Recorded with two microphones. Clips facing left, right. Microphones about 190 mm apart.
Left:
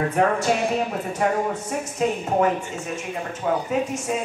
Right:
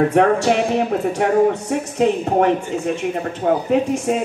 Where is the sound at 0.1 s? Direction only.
70° right (ahead or behind).